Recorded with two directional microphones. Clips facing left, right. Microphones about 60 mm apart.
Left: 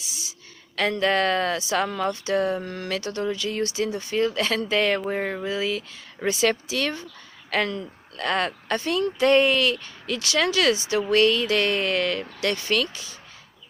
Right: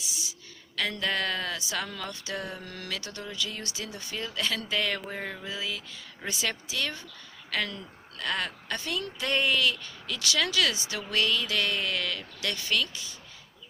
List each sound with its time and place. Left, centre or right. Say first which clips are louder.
0.8 s a woman's voice: left 8 dB; left
2.6 s speech: left 8 dB; left
2.9 s a woman's voice: left 12 dB; left
7.5 s a woman's voice: left 7 dB; left